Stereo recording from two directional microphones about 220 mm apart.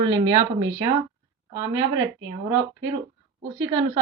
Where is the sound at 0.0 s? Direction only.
15° right (ahead or behind).